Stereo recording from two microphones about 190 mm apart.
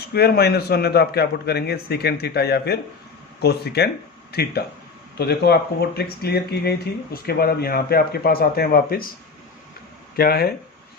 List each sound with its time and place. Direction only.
0.0 s speech: 55° left (ahead or behind)
10.2 s speech: 55° left (ahead or behind)